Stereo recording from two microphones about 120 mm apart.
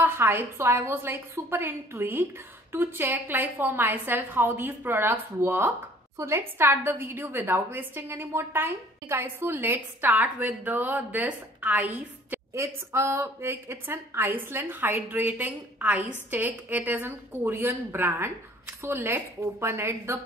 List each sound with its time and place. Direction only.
0.0 s a woman's voice: 20° right (ahead or behind)